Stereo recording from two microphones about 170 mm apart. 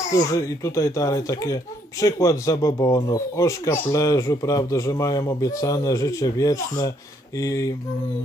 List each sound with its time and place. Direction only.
0.1 s speech: 20° left (ahead or behind)